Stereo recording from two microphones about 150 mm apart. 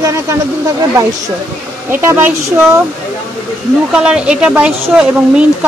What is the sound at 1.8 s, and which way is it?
Speech, 15° right (ahead or behind).